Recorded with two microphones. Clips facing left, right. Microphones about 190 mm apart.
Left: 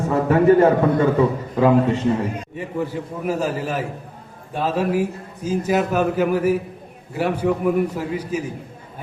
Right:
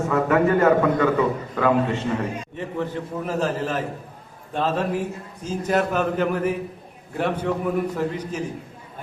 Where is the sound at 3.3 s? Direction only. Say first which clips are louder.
Left 2 dB; 10° left (ahead or behind).